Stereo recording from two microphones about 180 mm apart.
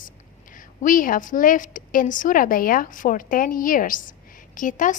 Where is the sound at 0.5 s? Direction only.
45° left (ahead or behind).